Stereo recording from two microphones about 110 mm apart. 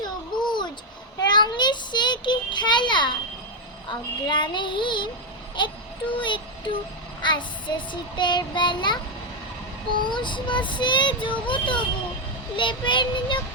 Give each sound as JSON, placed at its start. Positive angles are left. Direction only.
{"t": 0.4, "sound": "babbling", "side_deg": 45}
{"t": 1.2, "sound": "child singing", "side_deg": 40}
{"t": 10.0, "sound": "child singing", "side_deg": 45}